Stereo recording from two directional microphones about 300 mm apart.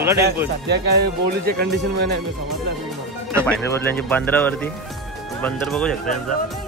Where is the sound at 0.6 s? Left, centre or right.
Right.